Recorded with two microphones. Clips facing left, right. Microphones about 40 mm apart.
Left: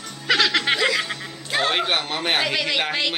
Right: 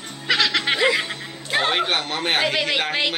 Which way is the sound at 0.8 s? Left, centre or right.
Centre.